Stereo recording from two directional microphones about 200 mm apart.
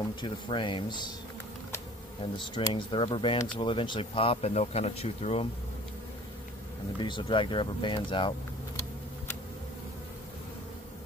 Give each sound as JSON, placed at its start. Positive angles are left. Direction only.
{"t": 0.2, "sound": "speech", "side_deg": 25}
{"t": 2.3, "sound": "speech", "side_deg": 20}
{"t": 7.0, "sound": "speech", "side_deg": 25}